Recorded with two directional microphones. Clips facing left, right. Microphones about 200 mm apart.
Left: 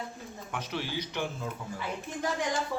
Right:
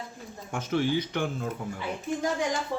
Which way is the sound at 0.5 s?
50° right (ahead or behind).